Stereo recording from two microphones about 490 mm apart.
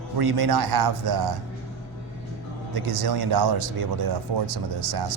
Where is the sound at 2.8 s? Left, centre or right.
Right.